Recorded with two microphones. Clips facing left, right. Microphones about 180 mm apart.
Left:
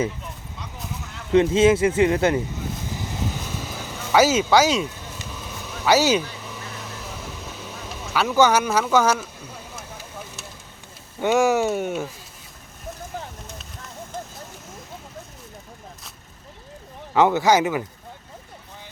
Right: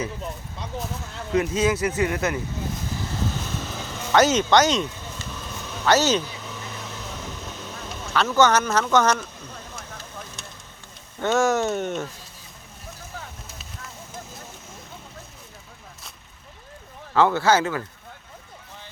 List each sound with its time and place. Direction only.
1.3 s speech: 25° left (ahead or behind)
3.0 s vehicle: 15° left (ahead or behind)
11.2 s speech: 10° left (ahead or behind)
17.2 s speech: 15° left (ahead or behind)